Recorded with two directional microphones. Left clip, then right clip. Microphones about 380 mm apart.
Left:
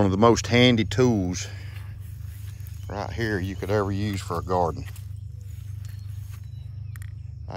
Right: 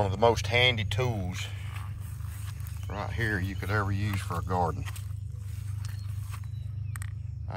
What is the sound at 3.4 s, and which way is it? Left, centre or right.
Speech, centre.